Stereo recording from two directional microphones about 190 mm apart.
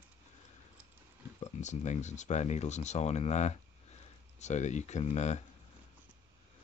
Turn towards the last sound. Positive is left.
turn(degrees=35)  # may be behind; listen again after turning